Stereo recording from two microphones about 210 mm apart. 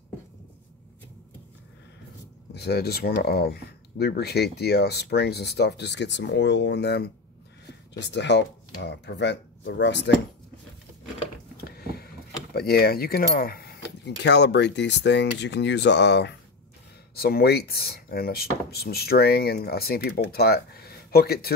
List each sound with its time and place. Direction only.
2.5 s speech: 50° left (ahead or behind)
11.5 s a sound: 45° left (ahead or behind)
12.5 s speech: 45° left (ahead or behind)